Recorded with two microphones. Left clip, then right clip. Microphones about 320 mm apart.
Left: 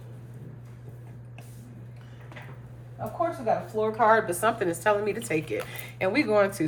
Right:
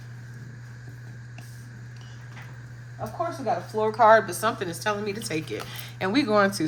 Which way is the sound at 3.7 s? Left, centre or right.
Right.